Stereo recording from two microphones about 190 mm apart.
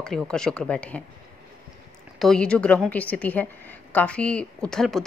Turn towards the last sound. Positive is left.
turn(degrees=5)  # may be behind; listen again after turning